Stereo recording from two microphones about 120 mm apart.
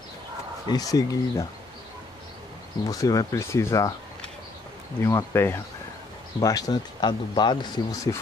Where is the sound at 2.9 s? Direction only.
30° left (ahead or behind).